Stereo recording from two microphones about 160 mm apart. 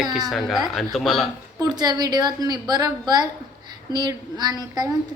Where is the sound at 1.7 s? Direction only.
25° right (ahead or behind).